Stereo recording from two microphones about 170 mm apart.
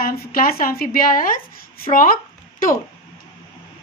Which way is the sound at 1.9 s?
55° left (ahead or behind).